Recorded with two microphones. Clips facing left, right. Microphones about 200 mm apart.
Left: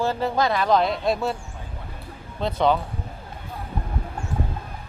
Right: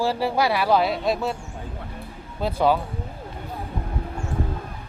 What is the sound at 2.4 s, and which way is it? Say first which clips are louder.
Speech: even; 5° right (ahead or behind).